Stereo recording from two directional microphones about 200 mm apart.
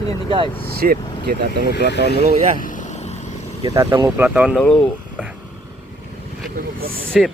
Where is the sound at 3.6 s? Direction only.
20° right (ahead or behind).